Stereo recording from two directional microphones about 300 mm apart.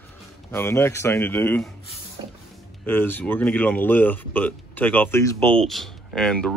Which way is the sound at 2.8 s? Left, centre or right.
Centre.